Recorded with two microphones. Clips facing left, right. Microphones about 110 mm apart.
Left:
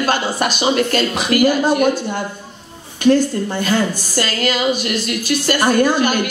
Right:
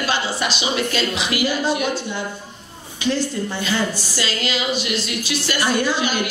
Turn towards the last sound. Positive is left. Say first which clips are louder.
# left 6 dB
turn(degrees=50)  # may be behind; listen again after turning